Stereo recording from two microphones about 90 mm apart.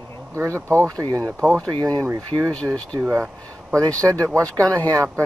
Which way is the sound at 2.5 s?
10° left (ahead or behind).